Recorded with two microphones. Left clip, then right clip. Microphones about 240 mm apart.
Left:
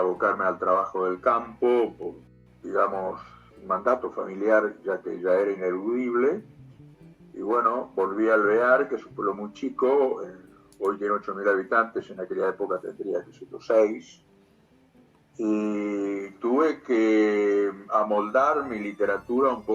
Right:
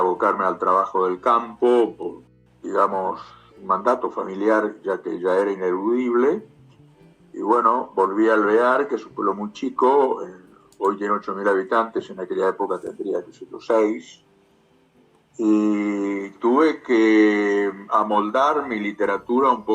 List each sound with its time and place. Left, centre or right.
0.2 s a man's voice: right
2.6 s mantra: right
7.3 s a man's voice: right
13.7 s mantra: right
15.4 s mantra: right